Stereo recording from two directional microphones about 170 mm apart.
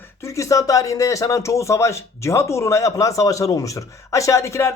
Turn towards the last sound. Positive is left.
turn(degrees=15)  # may be behind; listen again after turning